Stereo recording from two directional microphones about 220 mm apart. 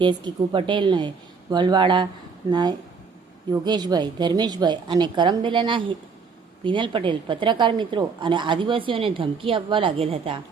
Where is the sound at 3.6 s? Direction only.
20° right (ahead or behind).